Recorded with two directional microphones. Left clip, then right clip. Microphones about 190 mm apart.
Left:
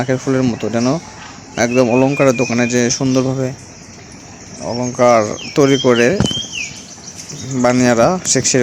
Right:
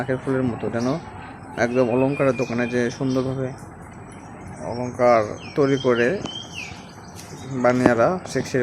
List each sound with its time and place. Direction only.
0.0 s speech: 35° left (ahead or behind)
4.7 s speech: 45° left (ahead or behind)
7.6 s speech: 35° left (ahead or behind)